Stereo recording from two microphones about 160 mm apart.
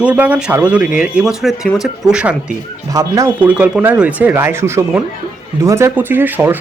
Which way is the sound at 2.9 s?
20° right (ahead or behind).